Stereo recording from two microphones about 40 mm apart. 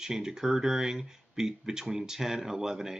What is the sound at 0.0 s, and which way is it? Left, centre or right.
Speech, centre.